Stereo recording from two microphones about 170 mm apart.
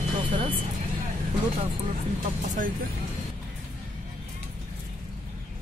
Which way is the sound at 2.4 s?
45° right (ahead or behind).